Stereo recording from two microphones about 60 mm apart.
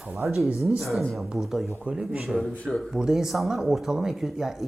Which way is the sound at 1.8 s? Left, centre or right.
Centre.